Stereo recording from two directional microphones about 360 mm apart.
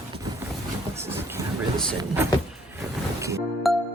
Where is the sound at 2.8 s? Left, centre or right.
Centre.